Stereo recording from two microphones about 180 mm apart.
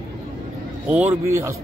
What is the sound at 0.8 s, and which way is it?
Speech, 10° right (ahead or behind).